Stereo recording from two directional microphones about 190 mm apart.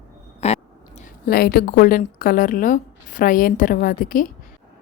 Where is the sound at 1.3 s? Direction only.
55° left (ahead or behind).